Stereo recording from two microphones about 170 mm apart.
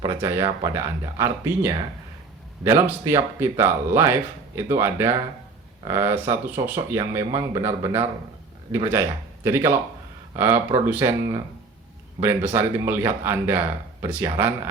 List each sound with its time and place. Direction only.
0.0 s speech: 15° right (ahead or behind)
9.4 s speech: 15° right (ahead or behind)